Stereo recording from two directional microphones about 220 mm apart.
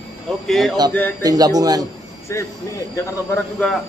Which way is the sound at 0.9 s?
10° left (ahead or behind).